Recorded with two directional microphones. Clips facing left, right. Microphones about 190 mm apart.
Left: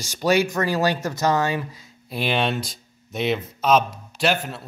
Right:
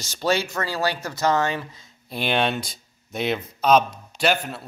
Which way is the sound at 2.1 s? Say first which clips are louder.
Even; centre (ahead or behind).